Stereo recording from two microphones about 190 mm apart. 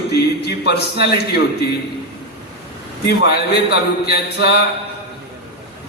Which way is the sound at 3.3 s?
60° left (ahead or behind).